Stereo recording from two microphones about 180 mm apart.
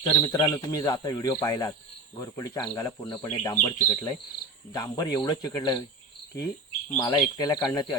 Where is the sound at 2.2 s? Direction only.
20° left (ahead or behind).